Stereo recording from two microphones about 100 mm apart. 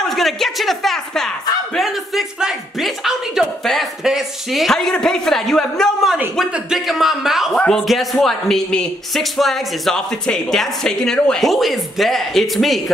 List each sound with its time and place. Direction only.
0.1 s a man's voice: centre (ahead or behind)